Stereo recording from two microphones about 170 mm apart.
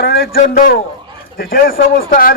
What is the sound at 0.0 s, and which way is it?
A man's voice, 65° left (ahead or behind).